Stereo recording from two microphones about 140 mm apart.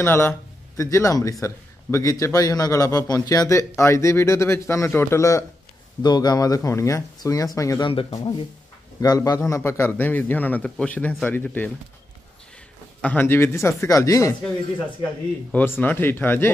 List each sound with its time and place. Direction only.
0.0 s a man's voice: 15° left (ahead or behind)
7.9 s speech: 40° left (ahead or behind)
9.0 s a man's voice: 25° left (ahead or behind); by 11.7 s 10° left (ahead or behind)
13.0 s a man's voice: 15° left (ahead or behind)
15.5 s a man's voice: 15° left (ahead or behind)